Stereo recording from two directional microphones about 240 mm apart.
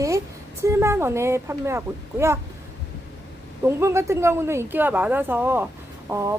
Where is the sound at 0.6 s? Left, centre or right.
Centre.